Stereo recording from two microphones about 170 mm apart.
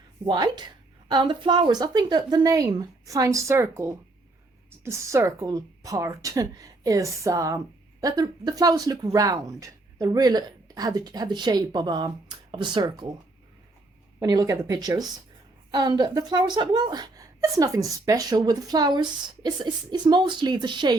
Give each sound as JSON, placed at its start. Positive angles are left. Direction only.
{"t": 0.3, "sound": "speech", "side_deg": -25}
{"t": 14.2, "sound": "speech", "side_deg": -20}